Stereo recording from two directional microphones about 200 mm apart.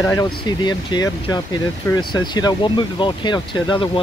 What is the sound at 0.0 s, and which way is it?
Speech, 15° left (ahead or behind).